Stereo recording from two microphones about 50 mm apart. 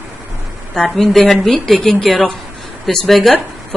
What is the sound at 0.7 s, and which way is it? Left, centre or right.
A woman's voice, centre.